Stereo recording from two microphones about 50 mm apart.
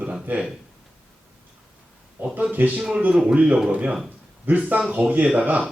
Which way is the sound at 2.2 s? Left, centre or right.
Right.